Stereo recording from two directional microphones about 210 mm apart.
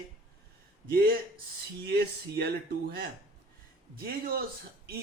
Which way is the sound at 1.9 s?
50° right (ahead or behind).